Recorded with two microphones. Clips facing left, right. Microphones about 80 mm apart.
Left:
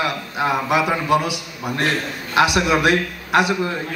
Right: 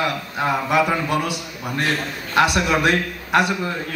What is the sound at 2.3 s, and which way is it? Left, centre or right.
A man's voice, centre.